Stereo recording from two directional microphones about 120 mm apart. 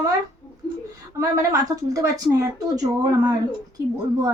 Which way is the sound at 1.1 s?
30° right (ahead or behind).